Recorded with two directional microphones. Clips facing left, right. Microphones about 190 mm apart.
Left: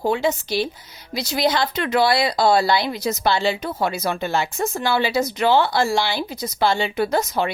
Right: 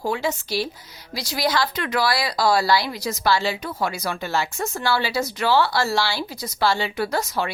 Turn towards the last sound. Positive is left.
turn(degrees=20)  # may be behind; listen again after turning